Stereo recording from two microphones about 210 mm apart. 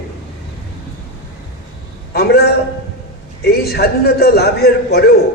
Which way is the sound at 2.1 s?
50° left (ahead or behind).